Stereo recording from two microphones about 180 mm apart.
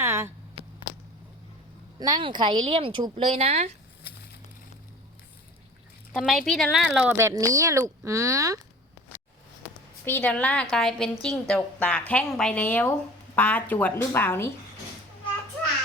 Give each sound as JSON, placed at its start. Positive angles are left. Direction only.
{"t": 0.0, "sound": "a sound", "side_deg": -15}
{"t": 2.0, "sound": "speech", "side_deg": -25}
{"t": 6.1, "sound": "a woman's voice", "side_deg": 0}
{"t": 10.1, "sound": "a woman's voice", "side_deg": 10}